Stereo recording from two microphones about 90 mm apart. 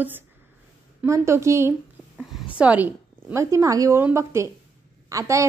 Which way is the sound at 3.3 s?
35° right (ahead or behind).